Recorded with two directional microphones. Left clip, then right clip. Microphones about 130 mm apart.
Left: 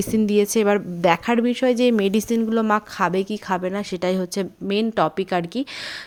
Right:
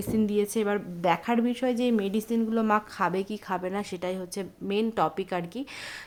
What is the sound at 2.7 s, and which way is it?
A woman's voice, 35° left (ahead or behind).